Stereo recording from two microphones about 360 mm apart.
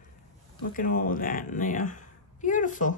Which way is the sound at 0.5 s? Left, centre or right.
Left.